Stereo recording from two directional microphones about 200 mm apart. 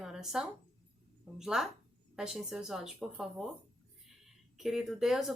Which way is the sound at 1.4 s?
5° right (ahead or behind).